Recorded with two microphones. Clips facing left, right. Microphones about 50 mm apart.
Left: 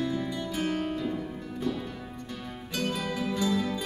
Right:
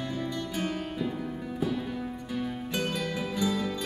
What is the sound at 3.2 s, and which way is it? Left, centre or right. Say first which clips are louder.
Music: left 1 dB; centre.